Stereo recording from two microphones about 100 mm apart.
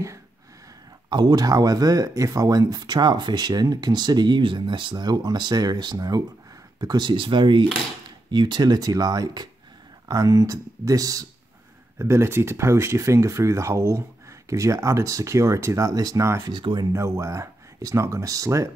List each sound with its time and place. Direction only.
1.1 s speech: 40° right (ahead or behind)
16.4 s speech: 45° right (ahead or behind)
16.9 s speech: 30° right (ahead or behind)